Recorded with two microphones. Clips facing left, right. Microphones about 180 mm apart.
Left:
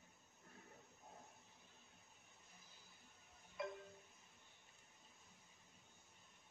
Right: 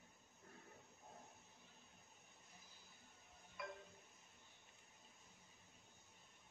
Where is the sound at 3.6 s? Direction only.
25° left (ahead or behind).